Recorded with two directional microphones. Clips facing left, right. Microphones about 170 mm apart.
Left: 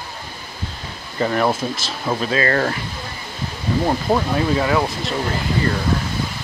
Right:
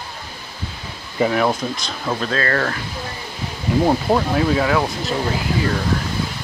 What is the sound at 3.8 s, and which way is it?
Speech, centre (ahead or behind).